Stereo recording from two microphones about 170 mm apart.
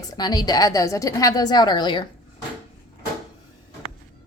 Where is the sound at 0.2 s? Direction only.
25° left (ahead or behind).